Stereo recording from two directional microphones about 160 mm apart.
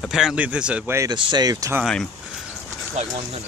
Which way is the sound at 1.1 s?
30° right (ahead or behind).